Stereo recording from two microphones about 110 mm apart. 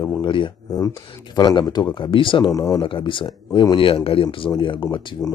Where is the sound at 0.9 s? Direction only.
45° left (ahead or behind).